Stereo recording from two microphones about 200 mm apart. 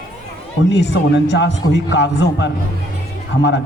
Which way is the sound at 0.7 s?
60° left (ahead or behind).